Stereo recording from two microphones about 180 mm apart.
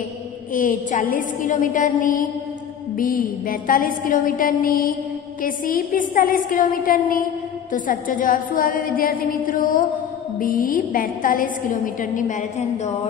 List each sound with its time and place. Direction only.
0.5 s a woman's voice: 50° left (ahead or behind)